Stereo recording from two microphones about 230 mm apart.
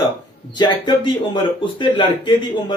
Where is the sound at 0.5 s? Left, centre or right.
Centre.